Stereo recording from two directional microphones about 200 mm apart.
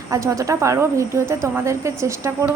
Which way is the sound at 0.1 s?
15° right (ahead or behind).